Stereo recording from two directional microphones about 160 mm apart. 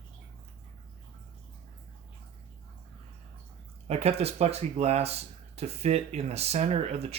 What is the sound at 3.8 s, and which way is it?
Speech, 40° right (ahead or behind).